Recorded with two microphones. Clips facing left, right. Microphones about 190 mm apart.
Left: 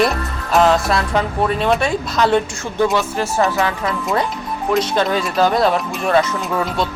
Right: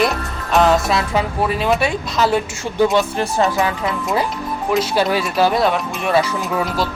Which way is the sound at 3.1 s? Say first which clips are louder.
Even; 20° right (ahead or behind).